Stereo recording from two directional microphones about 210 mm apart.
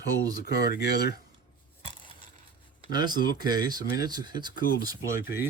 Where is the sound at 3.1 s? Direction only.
45° left (ahead or behind).